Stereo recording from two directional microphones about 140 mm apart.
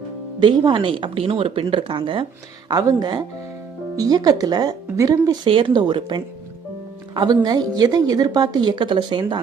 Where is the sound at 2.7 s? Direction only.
25° right (ahead or behind).